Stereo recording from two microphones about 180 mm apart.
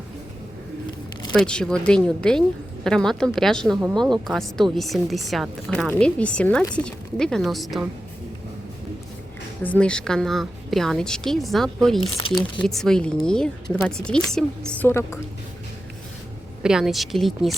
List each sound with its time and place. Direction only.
1.3 s a woman's voice: 5° left (ahead or behind)
9.6 s a woman's voice: 5° left (ahead or behind)
12.2 s speech: 30° left (ahead or behind)
12.6 s a woman's voice: 5° left (ahead or behind)
16.6 s a woman's voice: centre (ahead or behind)